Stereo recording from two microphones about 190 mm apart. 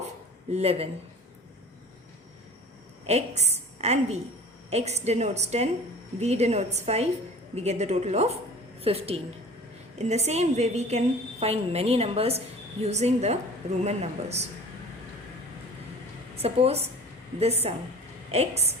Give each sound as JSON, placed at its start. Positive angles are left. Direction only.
{"t": 0.5, "sound": "a woman's voice", "side_deg": -30}
{"t": 3.1, "sound": "a woman's voice", "side_deg": -35}
{"t": 16.4, "sound": "a woman's voice", "side_deg": -30}